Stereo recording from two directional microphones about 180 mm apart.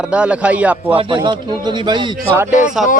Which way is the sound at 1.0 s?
25° right (ahead or behind).